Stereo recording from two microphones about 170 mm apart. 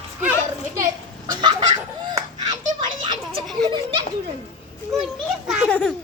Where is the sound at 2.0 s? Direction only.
25° right (ahead or behind).